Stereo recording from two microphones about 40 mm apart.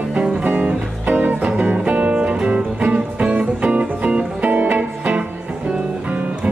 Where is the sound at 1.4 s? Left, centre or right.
Right.